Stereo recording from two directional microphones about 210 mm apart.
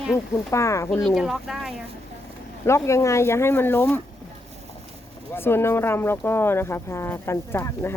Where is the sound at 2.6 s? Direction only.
15° left (ahead or behind).